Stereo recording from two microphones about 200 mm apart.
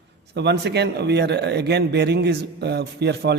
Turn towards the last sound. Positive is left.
turn(degrees=-55)  # may be behind; listen again after turning